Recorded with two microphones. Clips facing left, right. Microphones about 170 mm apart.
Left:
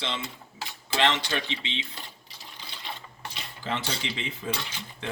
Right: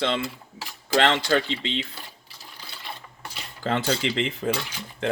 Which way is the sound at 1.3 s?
70° right (ahead or behind).